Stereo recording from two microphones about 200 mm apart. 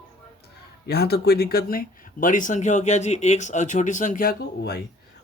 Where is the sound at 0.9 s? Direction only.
50° left (ahead or behind).